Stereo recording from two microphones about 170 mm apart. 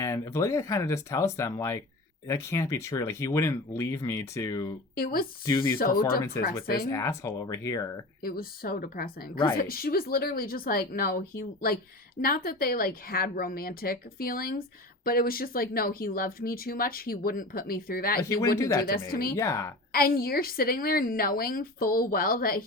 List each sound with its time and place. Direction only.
0.0 s speech: 15° left (ahead or behind)
4.9 s speech: 60° left (ahead or behind)
6.9 s speech: 15° left (ahead or behind)
8.2 s speech: 60° left (ahead or behind)
19.4 s speech: 15° left (ahead or behind)
19.9 s speech: 60° left (ahead or behind)